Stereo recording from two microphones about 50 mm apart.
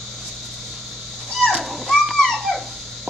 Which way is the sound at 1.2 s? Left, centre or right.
Centre.